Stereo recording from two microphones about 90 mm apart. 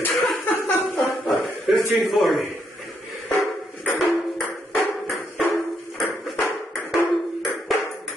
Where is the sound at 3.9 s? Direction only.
Centre (ahead or behind).